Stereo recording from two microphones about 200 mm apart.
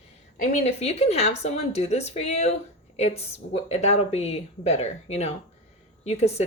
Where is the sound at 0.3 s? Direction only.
35° left (ahead or behind).